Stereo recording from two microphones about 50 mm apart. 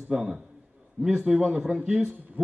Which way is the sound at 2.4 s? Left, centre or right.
Right.